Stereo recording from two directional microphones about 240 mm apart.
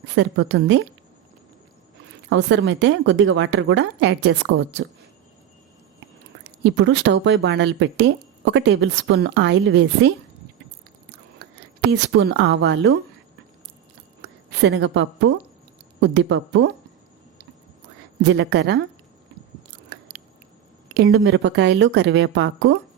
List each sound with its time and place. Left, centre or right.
0.0 s a woman's voice: right
2.3 s speech: right
6.4 s speech: right
11.8 s speech: right
14.2 s a sound: right
16.0 s speech: right
18.2 s speech: right
20.9 s speech: right